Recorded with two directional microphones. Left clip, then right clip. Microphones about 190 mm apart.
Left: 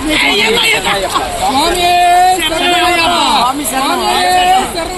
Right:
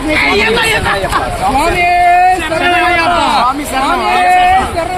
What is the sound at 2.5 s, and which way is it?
Speech, 5° left (ahead or behind).